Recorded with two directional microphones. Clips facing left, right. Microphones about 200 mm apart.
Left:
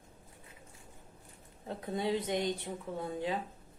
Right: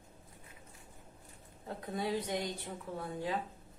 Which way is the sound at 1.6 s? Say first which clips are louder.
Left 3 dB; 20° left (ahead or behind).